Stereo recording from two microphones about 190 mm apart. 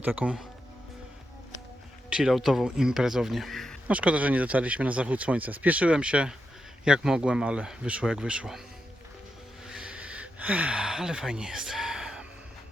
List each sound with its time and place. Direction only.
0.0 s speech: 5° right (ahead or behind)
2.0 s speech: 5° right (ahead or behind)
9.6 s a sound: 5° right (ahead or behind)